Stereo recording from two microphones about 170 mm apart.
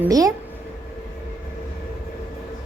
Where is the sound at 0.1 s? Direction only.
20° right (ahead or behind).